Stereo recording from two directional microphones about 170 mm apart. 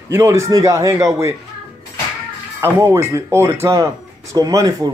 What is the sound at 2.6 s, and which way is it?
Speech, 15° right (ahead or behind).